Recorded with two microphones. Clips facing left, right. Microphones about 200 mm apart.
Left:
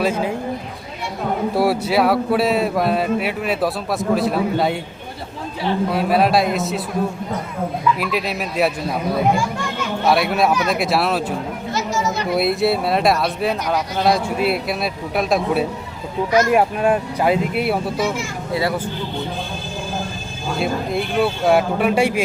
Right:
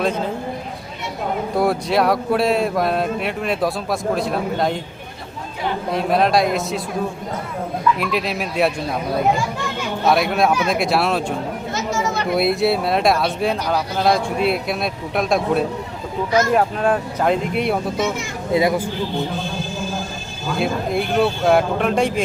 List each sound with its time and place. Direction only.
0.0 s speech: 10° left (ahead or behind)
1.5 s speech: 5° left (ahead or behind)
5.9 s speech: 5° left (ahead or behind)
7.9 s speech: centre (ahead or behind)
10.1 s speech: centre (ahead or behind)
17.9 s speech: 20° right (ahead or behind)
20.6 s speech: centre (ahead or behind)